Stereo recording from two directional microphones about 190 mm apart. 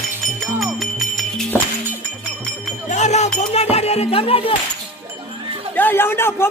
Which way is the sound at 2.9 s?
35° left (ahead or behind).